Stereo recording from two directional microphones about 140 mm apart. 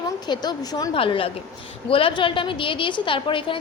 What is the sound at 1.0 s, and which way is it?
A woman's voice, 40° left (ahead or behind).